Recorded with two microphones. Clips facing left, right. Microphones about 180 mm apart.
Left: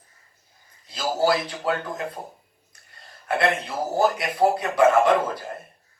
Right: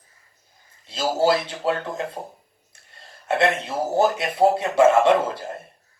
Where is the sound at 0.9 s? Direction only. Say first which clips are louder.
Right 2 dB; 25° right (ahead or behind).